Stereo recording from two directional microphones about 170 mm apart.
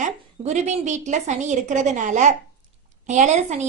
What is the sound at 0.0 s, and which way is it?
A woman's voice, 40° right (ahead or behind).